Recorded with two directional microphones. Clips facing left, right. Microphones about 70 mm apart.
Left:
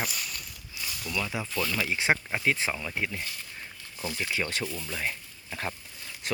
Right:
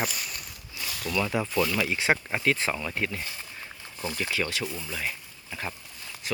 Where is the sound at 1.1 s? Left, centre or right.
Right.